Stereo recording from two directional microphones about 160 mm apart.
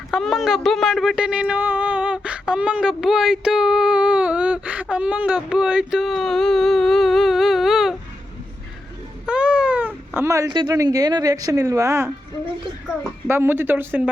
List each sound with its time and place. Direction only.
0.1 s speech: centre (ahead or behind)
9.2 s speech: 5° right (ahead or behind)
13.2 s speech: 15° right (ahead or behind)